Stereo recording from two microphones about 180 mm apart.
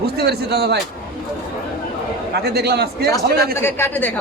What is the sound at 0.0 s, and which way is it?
Speech, 60° right (ahead or behind).